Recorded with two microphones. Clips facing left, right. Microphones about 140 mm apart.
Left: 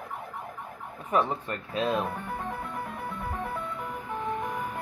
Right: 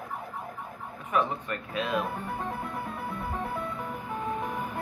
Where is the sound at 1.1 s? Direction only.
35° left (ahead or behind).